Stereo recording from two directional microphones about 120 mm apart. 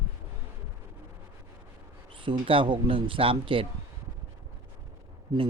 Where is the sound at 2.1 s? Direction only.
45° right (ahead or behind).